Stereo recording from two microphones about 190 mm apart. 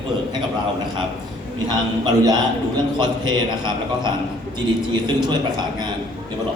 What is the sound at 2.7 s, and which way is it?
Speech, 25° right (ahead or behind).